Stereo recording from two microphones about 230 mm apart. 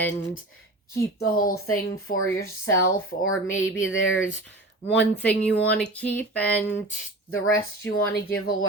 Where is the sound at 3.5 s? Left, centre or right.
Left.